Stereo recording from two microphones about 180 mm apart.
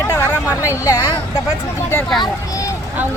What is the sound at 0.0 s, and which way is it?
Chatter, 15° left (ahead or behind).